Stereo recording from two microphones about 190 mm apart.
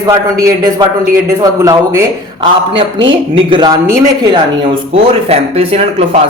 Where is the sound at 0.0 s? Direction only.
15° right (ahead or behind).